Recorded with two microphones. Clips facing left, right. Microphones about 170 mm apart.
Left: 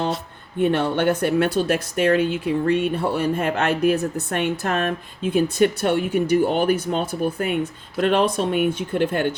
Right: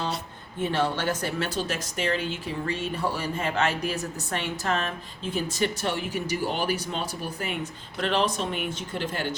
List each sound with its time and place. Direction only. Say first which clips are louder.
0.6 s speech: left 7 dB; 60° left (ahead or behind)